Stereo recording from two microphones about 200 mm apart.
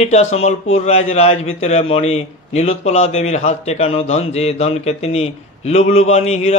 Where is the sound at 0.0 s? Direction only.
35° left (ahead or behind).